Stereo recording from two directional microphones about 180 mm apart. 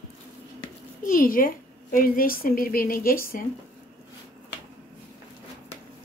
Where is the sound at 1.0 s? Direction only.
50° left (ahead or behind).